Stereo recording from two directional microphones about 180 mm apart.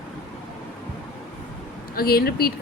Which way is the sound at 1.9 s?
60° left (ahead or behind).